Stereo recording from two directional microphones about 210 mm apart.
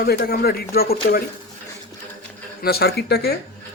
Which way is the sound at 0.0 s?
45° left (ahead or behind).